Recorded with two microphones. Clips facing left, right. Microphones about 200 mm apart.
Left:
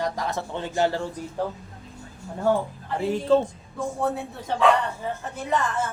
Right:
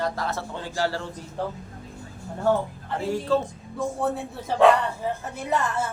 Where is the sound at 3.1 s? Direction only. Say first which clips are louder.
Left 3 dB; 20° left (ahead or behind).